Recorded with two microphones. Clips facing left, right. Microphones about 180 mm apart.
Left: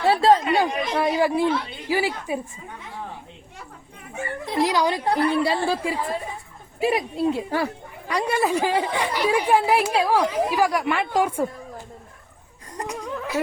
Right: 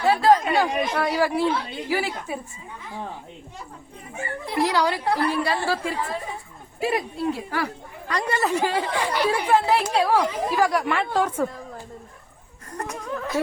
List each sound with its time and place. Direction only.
0.0 s speech: 25° left (ahead or behind)
4.5 s a woman's voice: 15° left (ahead or behind)
8.0 s speech: 10° left (ahead or behind)
12.7 s laughter: 15° left (ahead or behind)